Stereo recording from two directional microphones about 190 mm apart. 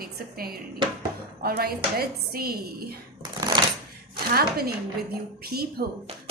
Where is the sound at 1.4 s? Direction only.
55° right (ahead or behind).